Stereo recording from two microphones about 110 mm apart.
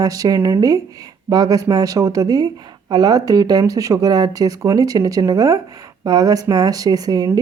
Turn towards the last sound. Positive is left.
turn(degrees=-35)  # may be behind; listen again after turning